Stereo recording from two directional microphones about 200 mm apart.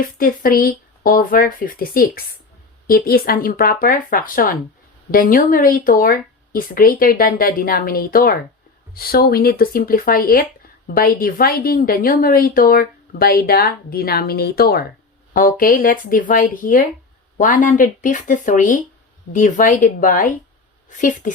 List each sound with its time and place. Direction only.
0.0 s a woman's voice: 45° left (ahead or behind)